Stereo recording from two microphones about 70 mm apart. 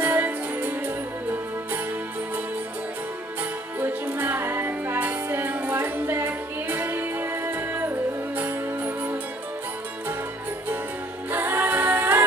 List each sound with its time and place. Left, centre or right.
0.0 s music: right
3.8 s music: right
11.3 s music: right